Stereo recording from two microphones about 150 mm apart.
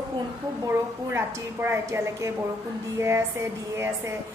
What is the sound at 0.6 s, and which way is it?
A woman's voice, 15° right (ahead or behind).